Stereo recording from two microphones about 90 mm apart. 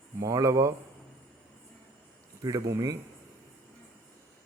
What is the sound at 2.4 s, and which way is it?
Speech, 40° right (ahead or behind).